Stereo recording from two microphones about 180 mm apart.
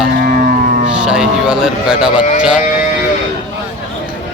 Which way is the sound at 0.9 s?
5° right (ahead or behind).